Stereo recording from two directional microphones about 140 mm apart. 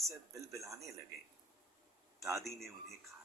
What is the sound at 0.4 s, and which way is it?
Speech, 20° right (ahead or behind).